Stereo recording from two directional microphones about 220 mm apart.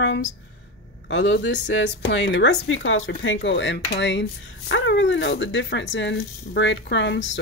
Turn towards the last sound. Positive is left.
turn(degrees=55)  # may be behind; listen again after turning